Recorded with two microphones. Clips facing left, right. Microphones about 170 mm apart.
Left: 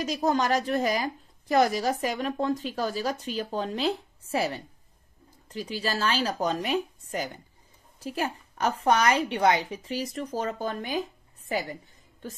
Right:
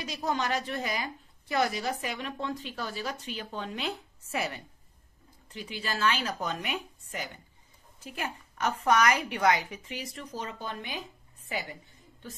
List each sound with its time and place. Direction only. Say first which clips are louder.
0.0 s a woman's voice: left 6 dB; 45° left (ahead or behind)